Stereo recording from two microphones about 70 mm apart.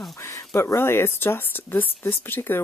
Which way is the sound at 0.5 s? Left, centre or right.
Left.